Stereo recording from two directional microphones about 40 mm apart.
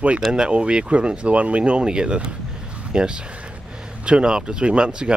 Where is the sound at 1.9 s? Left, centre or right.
Right.